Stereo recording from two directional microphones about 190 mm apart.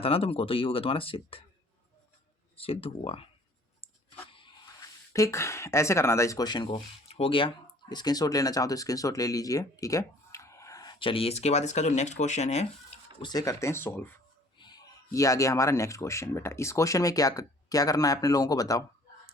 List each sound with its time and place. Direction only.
0.0 s speech: 30° left (ahead or behind)
2.6 s speech: 30° left (ahead or behind)
4.3 s speech: 25° left (ahead or behind)
14.6 s speech: 20° left (ahead or behind)